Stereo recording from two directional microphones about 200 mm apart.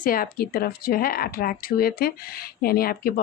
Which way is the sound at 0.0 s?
45° left (ahead or behind).